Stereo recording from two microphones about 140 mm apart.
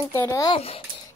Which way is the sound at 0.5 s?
45° left (ahead or behind).